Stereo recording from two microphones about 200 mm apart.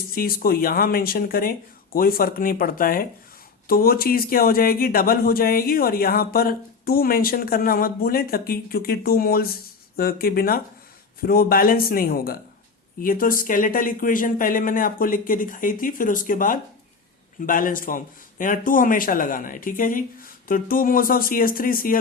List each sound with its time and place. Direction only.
0.1 s speech: 45° left (ahead or behind)